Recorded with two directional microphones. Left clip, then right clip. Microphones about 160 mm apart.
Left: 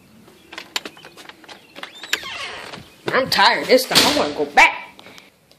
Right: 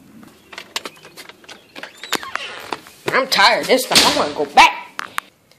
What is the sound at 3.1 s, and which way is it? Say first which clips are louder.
A woman's voice: right 2 dB; 5° right (ahead or behind).